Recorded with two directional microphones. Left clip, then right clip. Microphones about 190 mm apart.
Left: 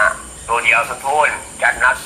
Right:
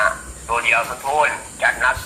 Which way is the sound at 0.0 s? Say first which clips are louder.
Left 3 dB; 20° left (ahead or behind).